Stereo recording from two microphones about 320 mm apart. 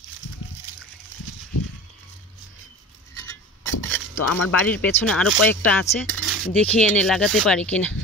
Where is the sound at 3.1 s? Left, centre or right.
Centre.